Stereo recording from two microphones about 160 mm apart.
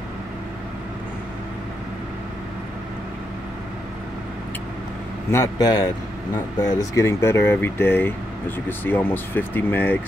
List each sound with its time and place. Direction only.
5.3 s a man's voice: 20° left (ahead or behind)